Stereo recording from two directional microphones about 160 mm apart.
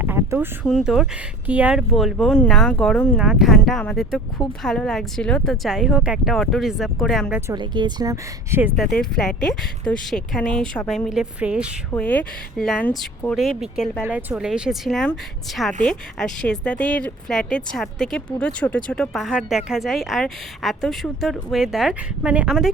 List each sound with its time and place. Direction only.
0.0 s a sound: 15° right (ahead or behind)
0.6 s speech: centre (ahead or behind)
7.5 s speech: 30° right (ahead or behind)
8.7 s speech: centre (ahead or behind)
11.9 s speech: 10° left (ahead or behind)
14.0 s speech: 10° right (ahead or behind)